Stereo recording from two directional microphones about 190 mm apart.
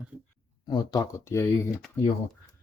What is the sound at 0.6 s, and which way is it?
Speech, 20° left (ahead or behind).